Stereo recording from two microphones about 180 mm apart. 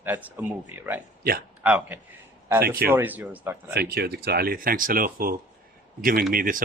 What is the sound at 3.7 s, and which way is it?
Speech, 60° right (ahead or behind).